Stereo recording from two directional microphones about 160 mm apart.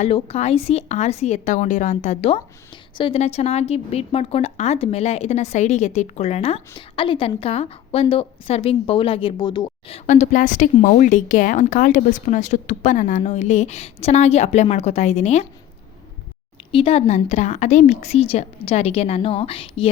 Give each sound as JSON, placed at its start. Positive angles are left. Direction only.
{"t": 0.0, "sound": "a woman's voice", "side_deg": 45}
{"t": 10.1, "sound": "a woman's voice", "side_deg": 50}
{"t": 16.7, "sound": "a woman's voice", "side_deg": 35}